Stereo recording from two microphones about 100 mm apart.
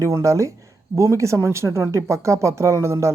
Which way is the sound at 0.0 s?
30° right (ahead or behind).